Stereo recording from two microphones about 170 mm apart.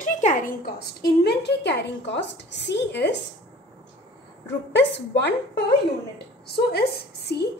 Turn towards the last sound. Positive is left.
turn(degrees=70)  # may be behind; listen again after turning